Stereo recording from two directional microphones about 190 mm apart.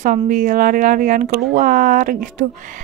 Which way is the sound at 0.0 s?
45° right (ahead or behind).